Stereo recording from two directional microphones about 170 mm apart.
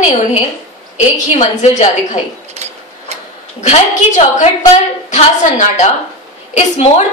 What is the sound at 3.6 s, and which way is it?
A woman's voice, 40° left (ahead or behind).